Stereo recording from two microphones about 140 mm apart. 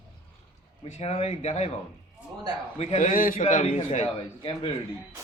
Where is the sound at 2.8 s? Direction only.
50° left (ahead or behind).